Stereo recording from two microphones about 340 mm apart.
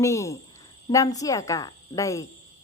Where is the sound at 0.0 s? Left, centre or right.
Centre.